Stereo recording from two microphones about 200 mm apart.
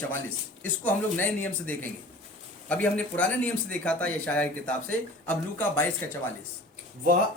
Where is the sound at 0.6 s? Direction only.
10° left (ahead or behind).